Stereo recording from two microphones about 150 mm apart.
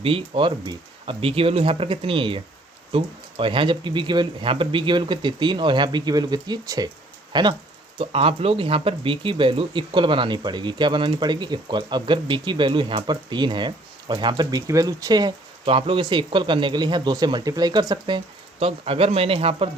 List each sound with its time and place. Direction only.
0.0 s speech: 35° right (ahead or behind)